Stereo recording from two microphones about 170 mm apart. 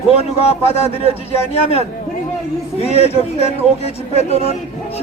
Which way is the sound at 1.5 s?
35° left (ahead or behind).